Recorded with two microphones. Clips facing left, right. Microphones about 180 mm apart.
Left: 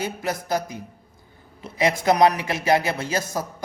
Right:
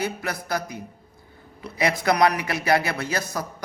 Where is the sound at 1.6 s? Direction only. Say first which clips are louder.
Left 2 dB; 25° left (ahead or behind).